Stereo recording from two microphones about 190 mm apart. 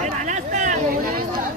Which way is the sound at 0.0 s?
40° right (ahead or behind).